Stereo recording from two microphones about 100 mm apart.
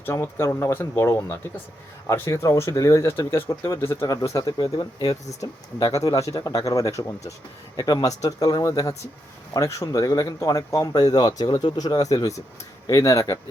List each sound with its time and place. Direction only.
0.0 s speech: 25° left (ahead or behind)
4.0 s speech: 40° left (ahead or behind)